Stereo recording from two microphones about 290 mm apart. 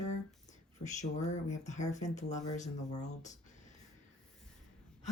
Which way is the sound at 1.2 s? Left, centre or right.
Left.